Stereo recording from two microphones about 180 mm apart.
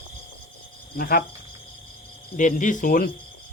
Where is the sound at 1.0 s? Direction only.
55° left (ahead or behind).